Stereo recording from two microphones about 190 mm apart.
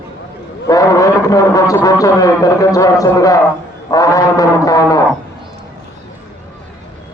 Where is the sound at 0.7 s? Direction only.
15° left (ahead or behind).